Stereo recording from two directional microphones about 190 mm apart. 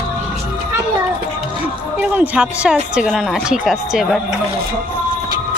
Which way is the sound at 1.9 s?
10° right (ahead or behind).